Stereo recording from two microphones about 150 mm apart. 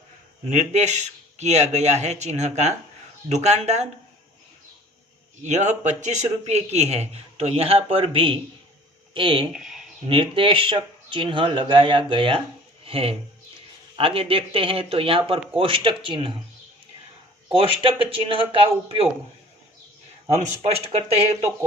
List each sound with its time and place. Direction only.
0.5 s a man's voice: 50° right (ahead or behind)
5.4 s a man's voice: 50° right (ahead or behind); by 9.5 s 35° right (ahead or behind)
9.5 s a sound: 5° right (ahead or behind)
10.1 s speech: 35° right (ahead or behind)
12.8 s a sound: 40° right (ahead or behind)
13.9 s speech: 40° right (ahead or behind)
17.5 s speech: 35° right (ahead or behind)
20.6 s a man's voice: 45° right (ahead or behind)